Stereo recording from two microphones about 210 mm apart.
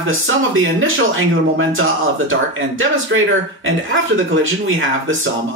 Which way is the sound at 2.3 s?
70° right (ahead or behind).